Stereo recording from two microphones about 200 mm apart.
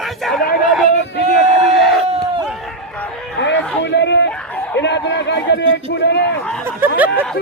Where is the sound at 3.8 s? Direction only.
60° left (ahead or behind).